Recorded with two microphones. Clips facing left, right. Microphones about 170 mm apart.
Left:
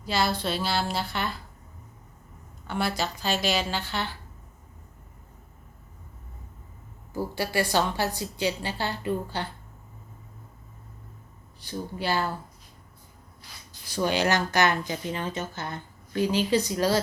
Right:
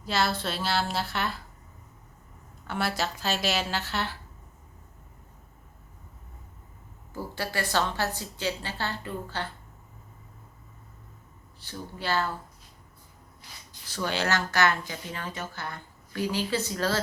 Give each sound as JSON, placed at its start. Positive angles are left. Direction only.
{"t": 0.0, "sound": "a woman's voice", "side_deg": 0}
{"t": 2.6, "sound": "a woman's voice", "side_deg": 0}
{"t": 7.1, "sound": "a woman's voice", "side_deg": 10}
{"t": 11.6, "sound": "a woman's voice", "side_deg": 15}
{"t": 13.8, "sound": "speech", "side_deg": 15}